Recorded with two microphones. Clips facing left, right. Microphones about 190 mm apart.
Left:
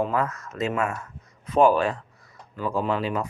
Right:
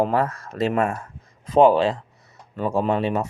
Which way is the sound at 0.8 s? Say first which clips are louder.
Right 4 dB; 30° right (ahead or behind).